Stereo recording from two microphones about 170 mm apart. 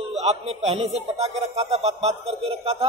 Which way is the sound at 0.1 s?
40° right (ahead or behind).